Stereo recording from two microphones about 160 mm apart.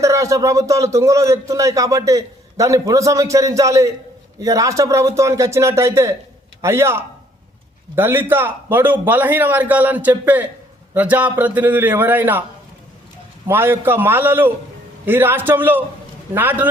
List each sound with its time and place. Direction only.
0.0 s a man's voice: 20° right (ahead or behind)
13.5 s a man's voice: 15° right (ahead or behind)